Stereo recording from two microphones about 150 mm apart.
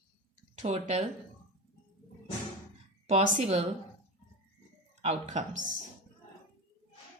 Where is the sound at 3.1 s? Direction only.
45° right (ahead or behind).